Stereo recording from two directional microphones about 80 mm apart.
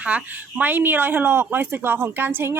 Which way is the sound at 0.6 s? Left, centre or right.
Right.